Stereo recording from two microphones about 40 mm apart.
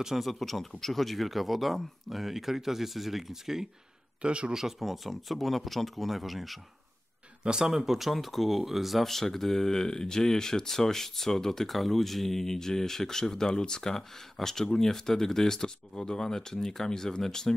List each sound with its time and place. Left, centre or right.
0.2 s speech: centre
4.2 s a man's voice: right
4.6 s speech: centre
7.4 s speech: centre
7.7 s speech: centre